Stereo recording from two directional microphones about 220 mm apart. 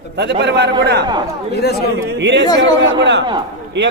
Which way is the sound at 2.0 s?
50° right (ahead or behind).